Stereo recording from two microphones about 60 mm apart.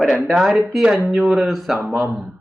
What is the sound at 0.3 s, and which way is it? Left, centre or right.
Speech, centre.